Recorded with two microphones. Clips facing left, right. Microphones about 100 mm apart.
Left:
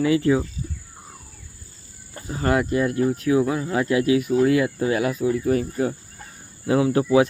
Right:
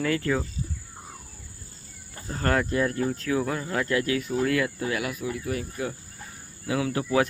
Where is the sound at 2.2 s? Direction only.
10° left (ahead or behind); by 7.0 s 30° left (ahead or behind).